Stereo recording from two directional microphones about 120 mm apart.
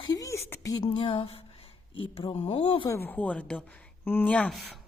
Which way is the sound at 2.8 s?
20° left (ahead or behind).